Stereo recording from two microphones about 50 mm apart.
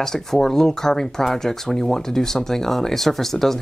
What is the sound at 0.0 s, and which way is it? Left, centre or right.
Speech, centre.